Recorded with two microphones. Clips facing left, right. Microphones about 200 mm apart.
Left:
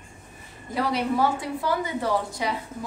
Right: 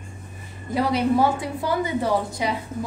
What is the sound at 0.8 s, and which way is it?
A woman's voice, 15° right (ahead or behind).